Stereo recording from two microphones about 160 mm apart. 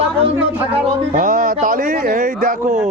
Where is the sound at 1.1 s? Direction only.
55° right (ahead or behind).